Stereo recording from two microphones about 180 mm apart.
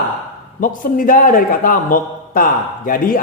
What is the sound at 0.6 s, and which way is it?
A man's voice, 50° left (ahead or behind).